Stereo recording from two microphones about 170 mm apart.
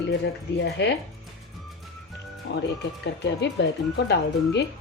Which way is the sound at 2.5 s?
90° left.